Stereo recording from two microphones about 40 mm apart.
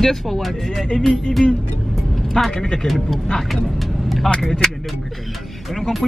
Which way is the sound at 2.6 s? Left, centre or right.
Centre.